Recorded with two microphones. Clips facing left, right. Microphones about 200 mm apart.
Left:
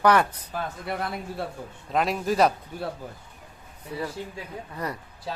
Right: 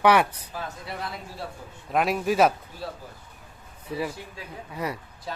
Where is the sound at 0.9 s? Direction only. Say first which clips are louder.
Left 7 dB; 55° left (ahead or behind).